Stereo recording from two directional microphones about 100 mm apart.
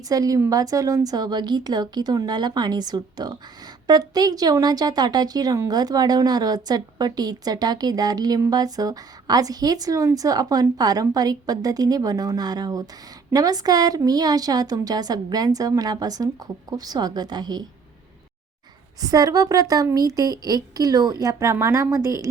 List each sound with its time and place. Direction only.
0.1 s a woman's voice: 35° right (ahead or behind)
18.9 s a woman's voice: 40° right (ahead or behind)